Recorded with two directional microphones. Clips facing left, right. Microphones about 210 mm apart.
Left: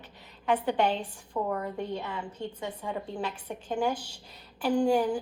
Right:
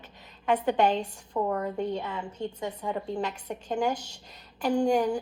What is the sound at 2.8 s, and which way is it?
Speech, 10° right (ahead or behind).